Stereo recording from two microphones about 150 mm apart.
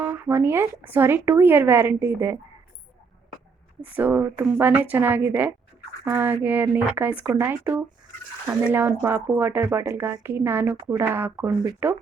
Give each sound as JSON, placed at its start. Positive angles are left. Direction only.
{"t": 0.0, "sound": "speech", "side_deg": -15}
{"t": 3.8, "sound": "speech", "side_deg": -10}